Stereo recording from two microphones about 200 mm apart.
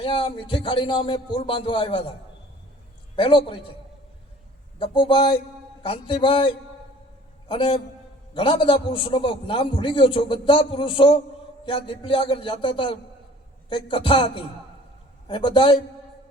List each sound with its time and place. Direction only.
0.0 s a man's voice: 25° left (ahead or behind)
3.2 s a man's voice: 25° left (ahead or behind)
4.8 s a man's voice: 25° left (ahead or behind)